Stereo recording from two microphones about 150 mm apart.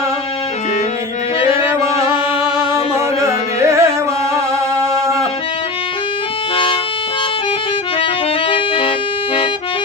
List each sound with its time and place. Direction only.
2.9 s music: 20° right (ahead or behind)
8.4 s music: 35° left (ahead or behind)